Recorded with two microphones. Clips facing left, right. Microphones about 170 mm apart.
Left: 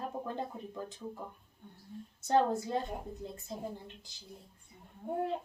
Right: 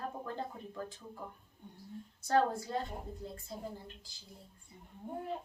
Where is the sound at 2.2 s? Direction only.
20° left (ahead or behind).